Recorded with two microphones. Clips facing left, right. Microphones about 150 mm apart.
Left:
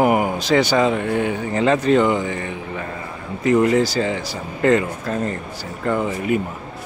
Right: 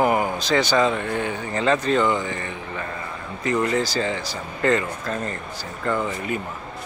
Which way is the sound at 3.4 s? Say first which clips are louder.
Left 6 dB; 20° left (ahead or behind).